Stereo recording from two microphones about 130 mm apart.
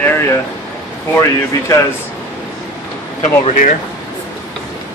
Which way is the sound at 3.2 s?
80° left.